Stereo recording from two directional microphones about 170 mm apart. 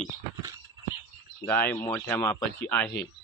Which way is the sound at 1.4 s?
10° left (ahead or behind).